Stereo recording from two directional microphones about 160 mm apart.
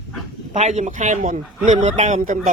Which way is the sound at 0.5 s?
45° right (ahead or behind).